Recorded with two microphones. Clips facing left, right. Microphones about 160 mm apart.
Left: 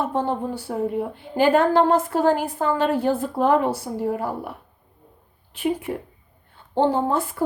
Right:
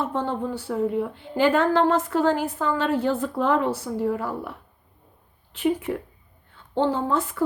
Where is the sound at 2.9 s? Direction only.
10° left (ahead or behind).